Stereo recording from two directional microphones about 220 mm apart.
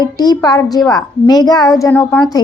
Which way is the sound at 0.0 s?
20° left (ahead or behind).